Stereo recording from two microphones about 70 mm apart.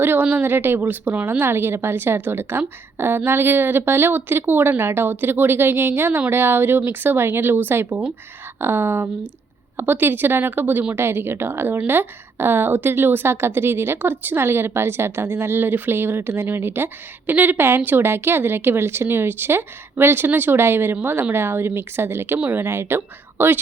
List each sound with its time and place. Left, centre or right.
0.0 s a woman's voice: right